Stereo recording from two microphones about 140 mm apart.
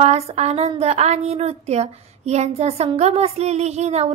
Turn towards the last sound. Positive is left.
turn(degrees=-50)  # may be behind; listen again after turning